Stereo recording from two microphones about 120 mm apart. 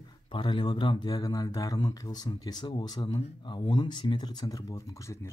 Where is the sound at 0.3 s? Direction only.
45° left (ahead or behind).